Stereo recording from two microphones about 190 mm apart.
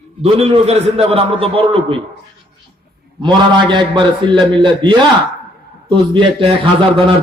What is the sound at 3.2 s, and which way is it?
A man's voice, 25° right (ahead or behind).